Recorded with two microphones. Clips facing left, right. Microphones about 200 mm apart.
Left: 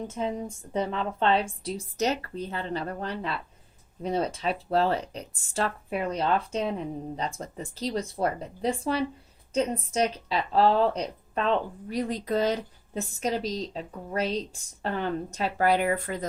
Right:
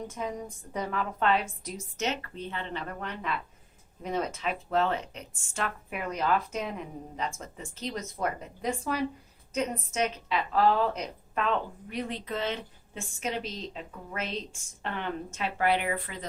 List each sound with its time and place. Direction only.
0.1 s a woman's voice: 25° left (ahead or behind); by 16.2 s 45° left (ahead or behind)